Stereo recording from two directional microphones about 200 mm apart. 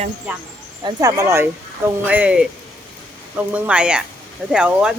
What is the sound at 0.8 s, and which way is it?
A woman's voice, 20° right (ahead or behind).